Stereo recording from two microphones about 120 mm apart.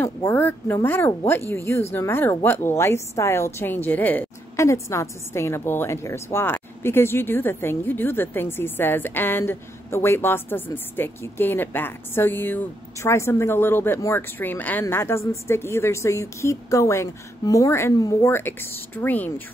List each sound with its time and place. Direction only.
0.0 s a woman's voice: 20° left (ahead or behind)
4.6 s a woman's voice: 25° left (ahead or behind)